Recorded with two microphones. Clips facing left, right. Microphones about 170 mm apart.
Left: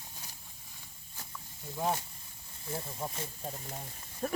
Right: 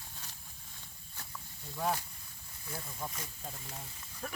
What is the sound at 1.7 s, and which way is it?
Speech, 20° left (ahead or behind).